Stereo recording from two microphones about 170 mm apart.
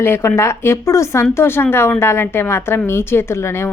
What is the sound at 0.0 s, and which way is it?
A woman's voice, 15° left (ahead or behind).